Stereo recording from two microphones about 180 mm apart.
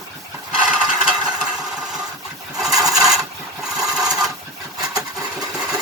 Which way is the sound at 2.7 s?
20° right (ahead or behind).